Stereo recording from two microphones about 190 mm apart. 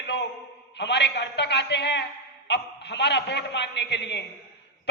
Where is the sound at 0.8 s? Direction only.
65° left (ahead or behind).